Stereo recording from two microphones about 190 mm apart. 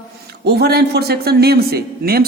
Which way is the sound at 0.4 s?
55° right (ahead or behind).